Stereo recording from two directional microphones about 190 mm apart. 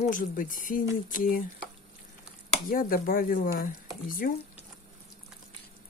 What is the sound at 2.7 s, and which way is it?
Speech, 50° left (ahead or behind).